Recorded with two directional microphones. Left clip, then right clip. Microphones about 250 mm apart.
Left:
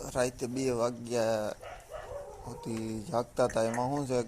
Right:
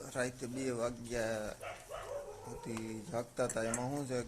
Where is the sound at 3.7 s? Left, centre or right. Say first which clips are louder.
Left 8 dB; centre.